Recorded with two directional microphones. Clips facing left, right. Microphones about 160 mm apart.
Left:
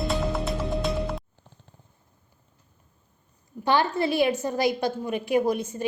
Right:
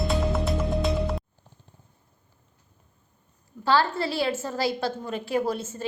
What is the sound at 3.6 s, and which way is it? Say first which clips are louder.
A woman's voice: even; 20° left (ahead or behind).